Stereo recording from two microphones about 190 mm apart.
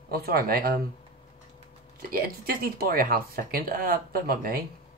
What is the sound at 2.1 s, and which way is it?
Speech, 50° right (ahead or behind).